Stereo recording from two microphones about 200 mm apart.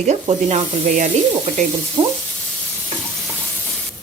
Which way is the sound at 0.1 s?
35° right (ahead or behind).